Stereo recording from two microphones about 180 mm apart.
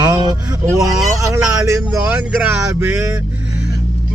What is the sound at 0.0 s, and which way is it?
Speech, 20° right (ahead or behind).